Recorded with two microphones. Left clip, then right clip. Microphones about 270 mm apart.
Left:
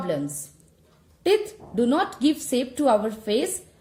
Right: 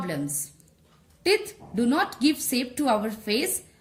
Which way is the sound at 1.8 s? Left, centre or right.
Right.